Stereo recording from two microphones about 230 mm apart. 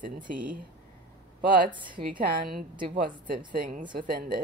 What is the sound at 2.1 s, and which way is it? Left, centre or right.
Speech, right.